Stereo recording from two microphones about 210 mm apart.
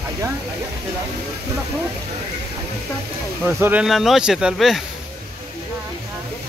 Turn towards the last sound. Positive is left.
turn(degrees=0)  # may be behind; listen again after turning